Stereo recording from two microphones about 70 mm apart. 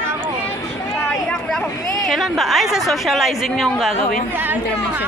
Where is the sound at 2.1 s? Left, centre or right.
Centre.